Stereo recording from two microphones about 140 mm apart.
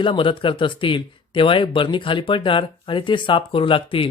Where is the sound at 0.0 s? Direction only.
35° left (ahead or behind).